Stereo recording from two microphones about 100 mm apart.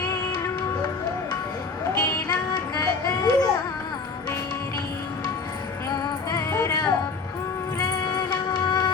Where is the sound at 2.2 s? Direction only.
40° left (ahead or behind).